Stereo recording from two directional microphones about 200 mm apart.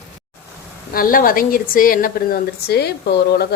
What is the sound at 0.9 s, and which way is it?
A woman's voice, 45° left (ahead or behind).